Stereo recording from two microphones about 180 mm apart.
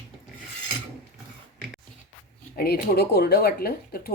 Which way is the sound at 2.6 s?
60° left (ahead or behind).